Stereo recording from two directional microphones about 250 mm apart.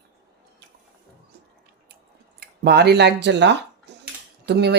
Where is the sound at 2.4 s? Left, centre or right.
Right.